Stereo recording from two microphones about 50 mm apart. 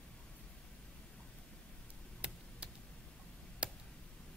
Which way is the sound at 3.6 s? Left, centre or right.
Right.